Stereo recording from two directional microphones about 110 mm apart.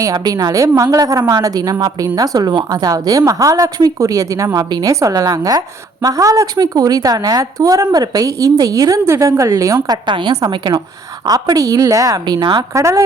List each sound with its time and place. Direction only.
0.0 s a woman's voice: 35° right (ahead or behind)
12.7 s speech: 30° right (ahead or behind)